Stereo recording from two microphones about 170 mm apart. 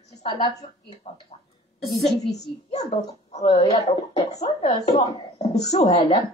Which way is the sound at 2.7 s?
40° left (ahead or behind).